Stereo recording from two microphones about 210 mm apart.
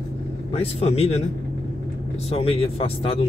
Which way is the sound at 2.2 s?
25° left (ahead or behind).